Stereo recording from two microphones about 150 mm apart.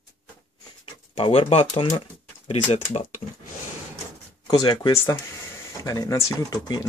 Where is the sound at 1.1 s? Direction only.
35° left (ahead or behind).